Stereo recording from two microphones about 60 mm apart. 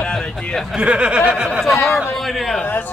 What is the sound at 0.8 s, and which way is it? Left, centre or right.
Speech, centre.